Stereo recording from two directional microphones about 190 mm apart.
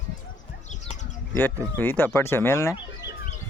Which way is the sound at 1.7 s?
10° left (ahead or behind).